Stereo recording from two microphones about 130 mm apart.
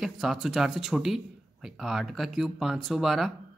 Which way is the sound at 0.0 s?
Centre (ahead or behind).